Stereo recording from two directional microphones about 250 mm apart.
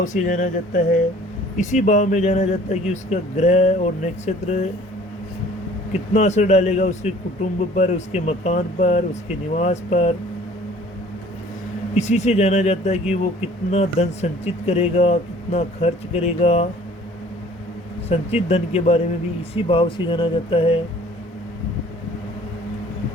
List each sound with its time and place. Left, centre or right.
0.0 s speech: left
5.9 s speech: left
11.9 s speech: left
18.1 s speech: left